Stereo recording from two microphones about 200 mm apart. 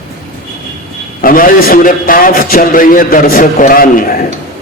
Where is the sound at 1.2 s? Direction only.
45° left (ahead or behind).